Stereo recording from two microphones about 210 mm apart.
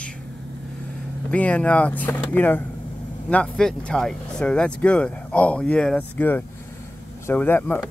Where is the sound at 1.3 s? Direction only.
5° left (ahead or behind).